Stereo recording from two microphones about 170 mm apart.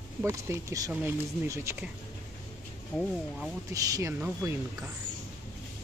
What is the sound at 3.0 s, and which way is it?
Speech, centre (ahead or behind).